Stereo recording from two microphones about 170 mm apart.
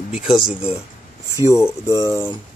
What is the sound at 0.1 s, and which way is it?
Speech, 5° right (ahead or behind).